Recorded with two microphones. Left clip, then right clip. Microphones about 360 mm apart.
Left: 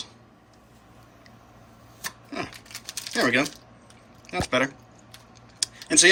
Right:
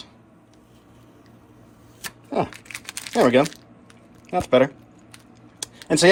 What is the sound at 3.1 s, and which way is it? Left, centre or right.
Speech, centre.